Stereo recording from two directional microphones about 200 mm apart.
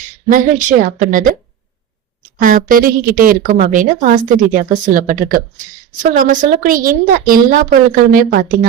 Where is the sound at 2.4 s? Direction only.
45° right (ahead or behind).